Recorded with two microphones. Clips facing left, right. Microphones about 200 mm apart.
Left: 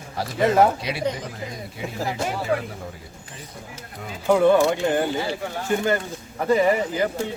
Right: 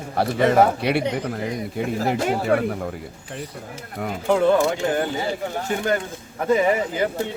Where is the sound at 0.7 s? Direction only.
65° right (ahead or behind).